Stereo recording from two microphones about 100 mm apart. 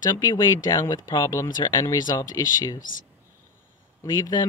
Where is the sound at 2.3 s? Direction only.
30° left (ahead or behind).